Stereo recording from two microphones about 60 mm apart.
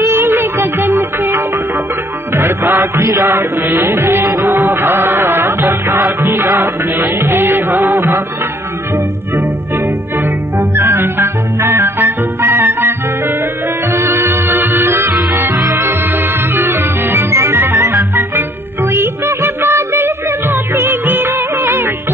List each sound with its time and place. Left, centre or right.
0.0 s music: right
3.6 s music: right
7.8 s music: right
10.6 s music: right
13.9 s music: right
16.5 s music: right